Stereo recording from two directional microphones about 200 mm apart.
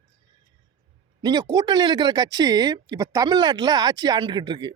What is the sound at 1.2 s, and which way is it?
Speech, 20° right (ahead or behind).